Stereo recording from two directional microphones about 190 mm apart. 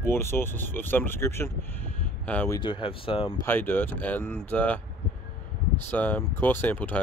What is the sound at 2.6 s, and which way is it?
Speech, 25° left (ahead or behind).